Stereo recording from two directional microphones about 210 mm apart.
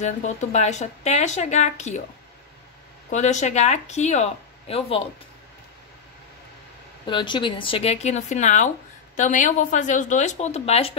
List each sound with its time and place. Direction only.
0.0 s a woman's voice: 35° left (ahead or behind)
3.1 s a woman's voice: 35° left (ahead or behind)
7.1 s a woman's voice: 25° left (ahead or behind)